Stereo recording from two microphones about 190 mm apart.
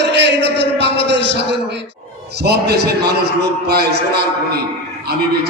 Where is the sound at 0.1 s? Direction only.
65° right (ahead or behind).